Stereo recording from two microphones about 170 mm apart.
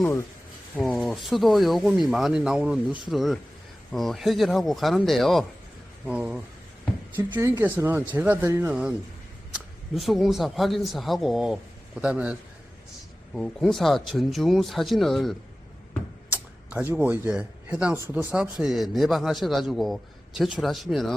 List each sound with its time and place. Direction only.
0.0 s speech: 15° left (ahead or behind)
0.8 s a man's voice: centre (ahead or behind)
9.9 s a man's voice: centre (ahead or behind)
13.3 s a man's voice: 5° left (ahead or behind)